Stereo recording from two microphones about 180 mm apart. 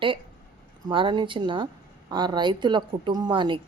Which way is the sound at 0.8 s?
25° right (ahead or behind).